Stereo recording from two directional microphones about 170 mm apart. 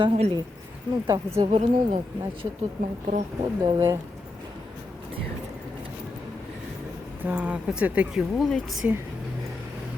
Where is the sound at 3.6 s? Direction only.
25° right (ahead or behind).